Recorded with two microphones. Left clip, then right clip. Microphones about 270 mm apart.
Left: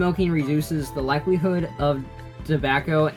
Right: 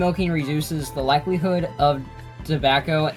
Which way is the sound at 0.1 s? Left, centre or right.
Centre.